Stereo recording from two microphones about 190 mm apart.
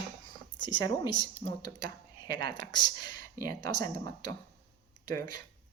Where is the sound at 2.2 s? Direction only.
20° left (ahead or behind).